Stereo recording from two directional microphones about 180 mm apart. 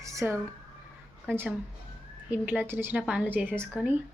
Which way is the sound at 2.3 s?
10° right (ahead or behind).